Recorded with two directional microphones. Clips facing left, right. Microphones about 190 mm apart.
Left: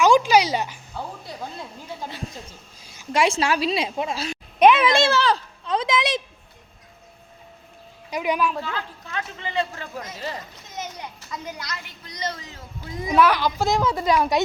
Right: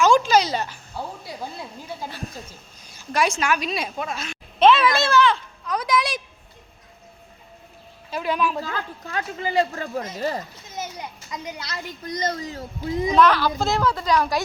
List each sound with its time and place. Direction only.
0.0 s a sound: 15° left (ahead or behind)
0.9 s speech: 5° right (ahead or behind)
3.0 s a woman's voice: 25° left (ahead or behind)
4.6 s a child's voice: 20° left (ahead or behind)
8.1 s a woman's voice: 15° left (ahead or behind)
8.4 s speech: centre (ahead or behind)
8.6 s speech: 40° right (ahead or behind)
11.3 s speech: 15° right (ahead or behind)
12.0 s speech: 45° right (ahead or behind)
13.1 s a woman's voice: 10° left (ahead or behind)